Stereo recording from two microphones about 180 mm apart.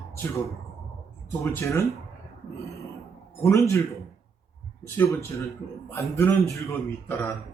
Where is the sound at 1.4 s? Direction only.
15° left (ahead or behind).